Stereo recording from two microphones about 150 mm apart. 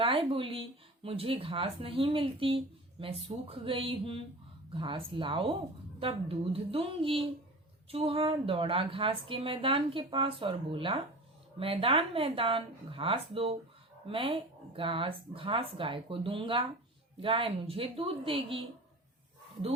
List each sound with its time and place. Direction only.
0.0 s a woman's voice: 35° right (ahead or behind)